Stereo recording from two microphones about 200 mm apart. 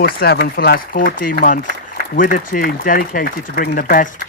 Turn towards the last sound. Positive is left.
turn(degrees=45)  # may be behind; listen again after turning